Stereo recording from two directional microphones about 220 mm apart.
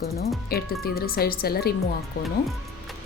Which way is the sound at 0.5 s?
45° left (ahead or behind).